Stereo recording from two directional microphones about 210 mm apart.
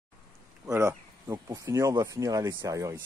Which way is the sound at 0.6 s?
15° right (ahead or behind).